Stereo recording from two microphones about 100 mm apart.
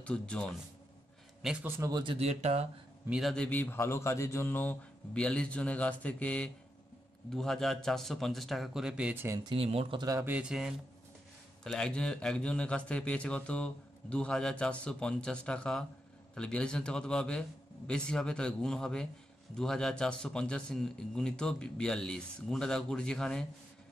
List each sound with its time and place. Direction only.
0.0 s a man's voice: 10° left (ahead or behind)
1.8 s speech: 40° right (ahead or behind)
2.1 s speech: 90° right
3.1 s a man's voice: centre (ahead or behind)
3.3 s a man's voice: 10° left (ahead or behind)
3.6 s speech: 25° left (ahead or behind)
5.1 s a man's voice: 10° left (ahead or behind); by 9.1 s 10° right (ahead or behind)
9.1 s speech: 25° right (ahead or behind)
9.6 s speech: 70° right (ahead or behind)
9.9 s speech: 40° right (ahead or behind)
10.2 s speech: 10° right (ahead or behind)
11.6 s a man's voice: 5° left (ahead or behind)